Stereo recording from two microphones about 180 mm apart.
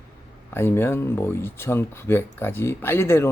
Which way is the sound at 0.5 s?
15° left (ahead or behind).